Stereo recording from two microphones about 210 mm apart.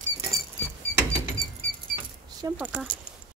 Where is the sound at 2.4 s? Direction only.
10° right (ahead or behind).